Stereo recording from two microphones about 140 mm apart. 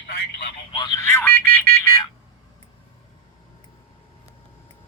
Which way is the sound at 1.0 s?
15° left (ahead or behind).